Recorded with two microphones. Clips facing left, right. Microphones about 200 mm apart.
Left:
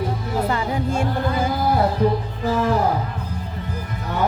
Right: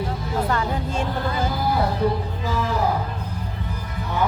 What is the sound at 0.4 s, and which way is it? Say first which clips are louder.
Speech: left 3 dB; 10° left (ahead or behind).